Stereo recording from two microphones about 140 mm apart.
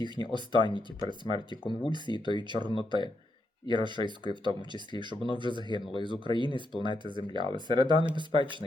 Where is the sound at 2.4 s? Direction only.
35° right (ahead or behind).